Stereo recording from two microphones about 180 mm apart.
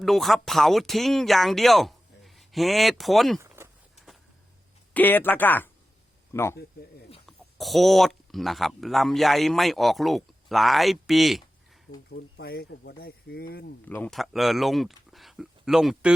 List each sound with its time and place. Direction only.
0.0 s speech: centre (ahead or behind)
3.4 s a sound: 15° right (ahead or behind)
3.9 s a sound: centre (ahead or behind)
4.9 s speech: 10° left (ahead or behind)
7.3 s speech: centre (ahead or behind)
12.1 s speech: 60° left (ahead or behind)
13.8 s speech: 10° left (ahead or behind)